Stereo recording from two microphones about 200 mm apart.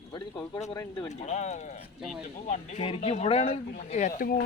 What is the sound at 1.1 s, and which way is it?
Speech, 35° left (ahead or behind).